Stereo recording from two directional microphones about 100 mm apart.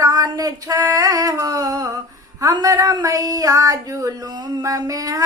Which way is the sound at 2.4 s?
35° right (ahead or behind).